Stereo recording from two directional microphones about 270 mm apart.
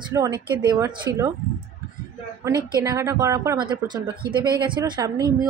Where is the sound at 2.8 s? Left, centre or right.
Centre.